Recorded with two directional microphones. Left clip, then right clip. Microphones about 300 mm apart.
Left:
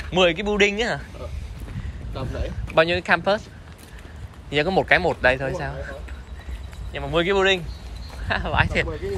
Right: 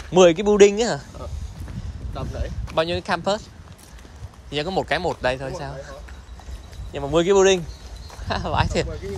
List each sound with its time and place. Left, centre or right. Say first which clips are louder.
0.1 s speech: right 5 dB; right
2.1 s speech: left 1 dB; centre
4.5 s speech: left 5 dB; centre